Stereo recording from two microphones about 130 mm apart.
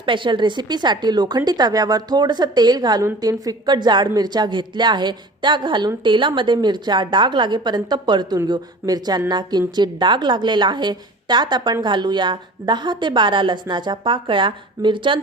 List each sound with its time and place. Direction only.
0.0 s speech: 40° right (ahead or behind)